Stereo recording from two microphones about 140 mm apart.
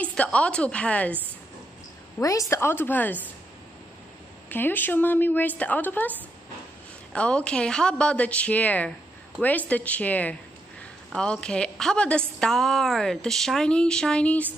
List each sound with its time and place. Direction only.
0.0 s a woman's voice: 10° left (ahead or behind)
2.1 s a woman's voice: 20° left (ahead or behind)
4.5 s a woman's voice: 15° left (ahead or behind)